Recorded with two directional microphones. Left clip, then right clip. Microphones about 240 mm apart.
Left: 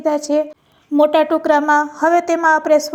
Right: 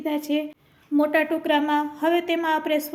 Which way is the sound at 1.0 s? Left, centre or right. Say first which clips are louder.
Left 8 dB; left.